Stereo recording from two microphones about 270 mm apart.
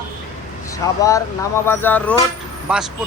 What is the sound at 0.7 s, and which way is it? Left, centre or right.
Speech, centre.